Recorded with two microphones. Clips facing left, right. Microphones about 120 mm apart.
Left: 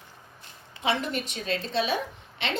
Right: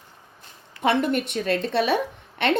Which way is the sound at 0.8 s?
55° right (ahead or behind).